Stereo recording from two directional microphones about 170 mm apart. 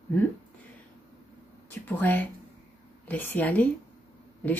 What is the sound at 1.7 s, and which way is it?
A woman's voice, 10° left (ahead or behind).